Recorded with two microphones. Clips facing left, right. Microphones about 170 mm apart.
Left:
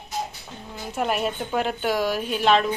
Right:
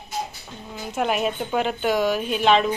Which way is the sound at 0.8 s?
Centre (ahead or behind).